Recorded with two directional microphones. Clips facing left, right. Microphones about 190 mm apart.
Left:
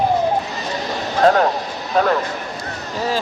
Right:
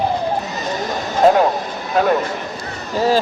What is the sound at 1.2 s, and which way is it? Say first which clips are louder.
Speech: right 2 dB; 5° right (ahead or behind).